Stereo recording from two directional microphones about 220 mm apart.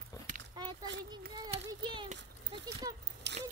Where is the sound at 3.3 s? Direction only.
50° right (ahead or behind).